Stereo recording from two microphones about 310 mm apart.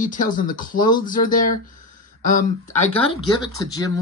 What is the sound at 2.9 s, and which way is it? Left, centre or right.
Speech, centre.